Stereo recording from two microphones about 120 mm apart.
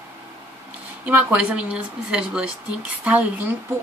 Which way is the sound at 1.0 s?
10° right (ahead or behind).